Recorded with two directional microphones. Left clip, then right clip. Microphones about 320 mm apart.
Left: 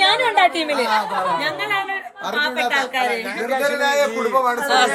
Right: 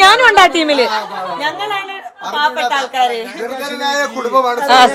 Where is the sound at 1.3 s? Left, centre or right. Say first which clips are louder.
Right 3 dB; centre.